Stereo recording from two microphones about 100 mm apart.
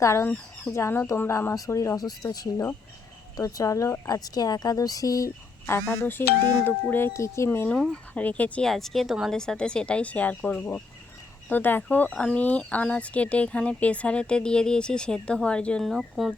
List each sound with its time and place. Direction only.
0.0 s speech: 30° left (ahead or behind)
8.1 s speech: 15° left (ahead or behind)
8.7 s speech: centre (ahead or behind)